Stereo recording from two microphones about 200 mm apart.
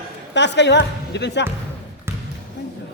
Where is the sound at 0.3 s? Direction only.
60° left (ahead or behind).